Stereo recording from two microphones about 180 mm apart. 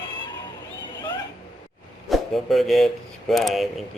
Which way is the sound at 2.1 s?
Centre (ahead or behind).